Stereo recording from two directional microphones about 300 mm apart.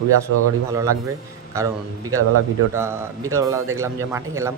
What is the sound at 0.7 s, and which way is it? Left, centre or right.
Speech, centre.